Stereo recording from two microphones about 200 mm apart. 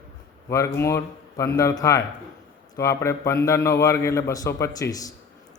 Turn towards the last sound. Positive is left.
turn(degrees=15)  # may be behind; listen again after turning